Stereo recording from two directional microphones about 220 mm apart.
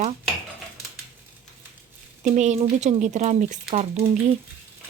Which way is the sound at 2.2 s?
35° right (ahead or behind).